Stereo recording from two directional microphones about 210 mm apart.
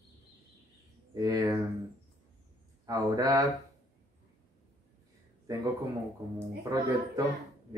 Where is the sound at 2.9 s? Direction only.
15° right (ahead or behind).